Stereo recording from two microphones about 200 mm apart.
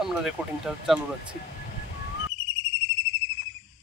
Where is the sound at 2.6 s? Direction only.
65° left (ahead or behind).